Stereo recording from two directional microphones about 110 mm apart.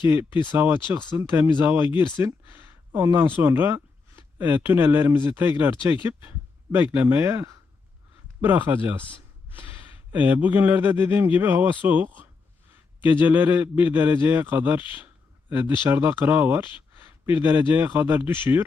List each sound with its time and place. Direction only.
0.5 s a man's voice: 20° right (ahead or behind)
10.2 s a man's voice: 15° right (ahead or behind)